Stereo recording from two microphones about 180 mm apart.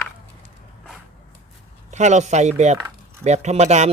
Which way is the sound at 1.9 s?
40° right (ahead or behind).